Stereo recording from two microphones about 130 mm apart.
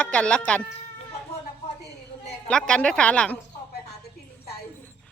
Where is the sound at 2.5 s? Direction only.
5° left (ahead or behind).